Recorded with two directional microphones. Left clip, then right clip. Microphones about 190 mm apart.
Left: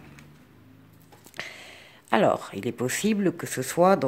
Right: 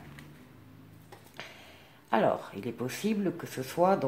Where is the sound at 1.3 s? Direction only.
50° left (ahead or behind).